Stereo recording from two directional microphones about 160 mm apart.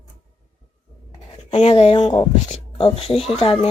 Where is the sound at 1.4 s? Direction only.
40° left (ahead or behind).